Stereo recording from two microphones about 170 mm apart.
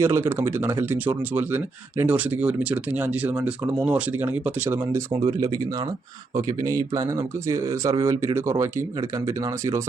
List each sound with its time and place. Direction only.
0.0 s speech: 15° right (ahead or behind)